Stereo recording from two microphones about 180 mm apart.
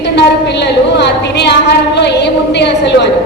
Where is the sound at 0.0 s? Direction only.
70° left (ahead or behind).